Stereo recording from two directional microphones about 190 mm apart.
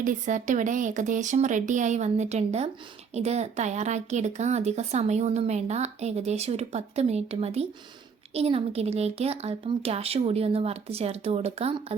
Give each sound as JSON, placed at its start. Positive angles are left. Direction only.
{"t": 0.0, "sound": "a woman's voice", "side_deg": -40}